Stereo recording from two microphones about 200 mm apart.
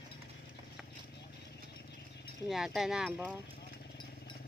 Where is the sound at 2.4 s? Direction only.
Centre (ahead or behind).